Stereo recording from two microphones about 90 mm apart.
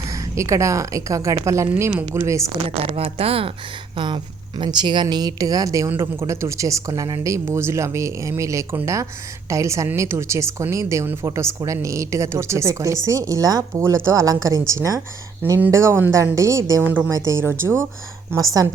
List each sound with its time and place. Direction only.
0.1 s a woman's voice: 35° right (ahead or behind)
2.6 s speech: 90° right
3.9 s a woman's voice: 60° right (ahead or behind); by 16.8 s 40° right (ahead or behind)
16.8 s a woman's voice: 20° right (ahead or behind)
17.1 s a woman's voice: 35° right (ahead or behind)
18.3 s a woman's voice: 40° right (ahead or behind)